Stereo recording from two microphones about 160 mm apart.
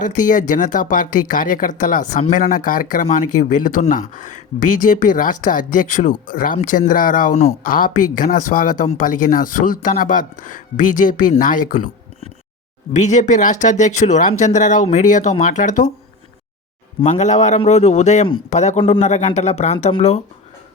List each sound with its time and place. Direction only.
0.0 s speech: 55° left (ahead or behind)
13.0 s speech: 50° left (ahead or behind)
17.0 s speech: 45° left (ahead or behind)